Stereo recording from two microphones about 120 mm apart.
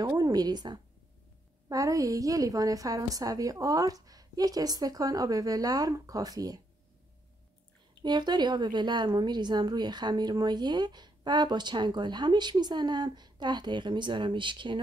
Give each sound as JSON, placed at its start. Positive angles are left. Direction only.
{"t": 0.0, "sound": "a woman's voice", "side_deg": -30}
{"t": 8.0, "sound": "a woman's voice", "side_deg": -35}